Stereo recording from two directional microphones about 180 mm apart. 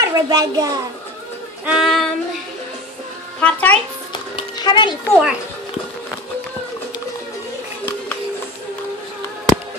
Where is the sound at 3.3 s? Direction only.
10° left (ahead or behind).